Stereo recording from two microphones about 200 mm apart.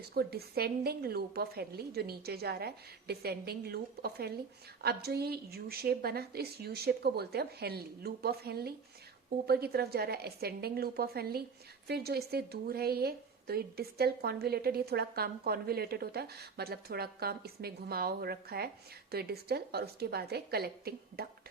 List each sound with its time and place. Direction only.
0.0 s speech: 50° right (ahead or behind)